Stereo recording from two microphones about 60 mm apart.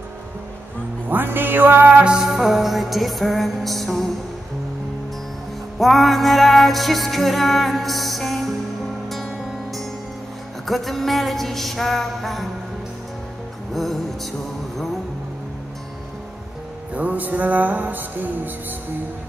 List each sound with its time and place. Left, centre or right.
1.0 s music: right
1.9 s music: right
2.1 s music: centre
5.8 s music: centre
13.7 s music: centre
16.9 s music: right